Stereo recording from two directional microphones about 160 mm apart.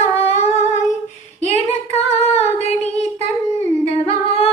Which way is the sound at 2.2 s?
40° left (ahead or behind).